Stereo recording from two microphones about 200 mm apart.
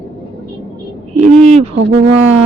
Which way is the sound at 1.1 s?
35° right (ahead or behind).